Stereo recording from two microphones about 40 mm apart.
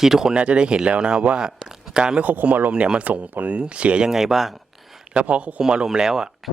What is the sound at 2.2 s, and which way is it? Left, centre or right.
Speech, right.